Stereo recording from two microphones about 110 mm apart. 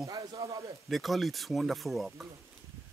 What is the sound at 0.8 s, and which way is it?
Speech, centre (ahead or behind).